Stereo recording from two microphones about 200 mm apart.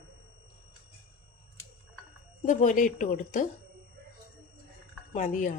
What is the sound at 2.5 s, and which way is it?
A woman's voice, 40° left (ahead or behind).